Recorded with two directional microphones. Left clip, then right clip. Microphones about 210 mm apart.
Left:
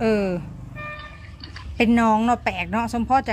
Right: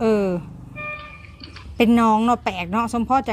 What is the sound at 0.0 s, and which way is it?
Music, 15° right (ahead or behind).